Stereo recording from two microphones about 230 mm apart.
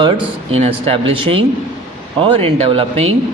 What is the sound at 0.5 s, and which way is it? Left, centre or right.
Speech, right.